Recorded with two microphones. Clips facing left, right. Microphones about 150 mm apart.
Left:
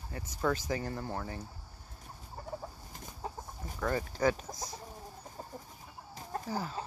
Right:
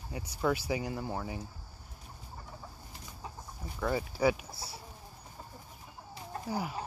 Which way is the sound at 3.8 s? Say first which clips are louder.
Right 1 dB; 10° right (ahead or behind).